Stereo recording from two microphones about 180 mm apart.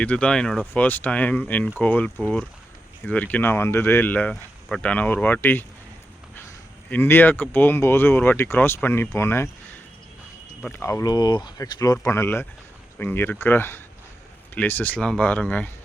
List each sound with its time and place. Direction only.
0.0 s speech: 5° left (ahead or behind)
6.9 s speech: 10° left (ahead or behind)
10.6 s speech: 10° left (ahead or behind)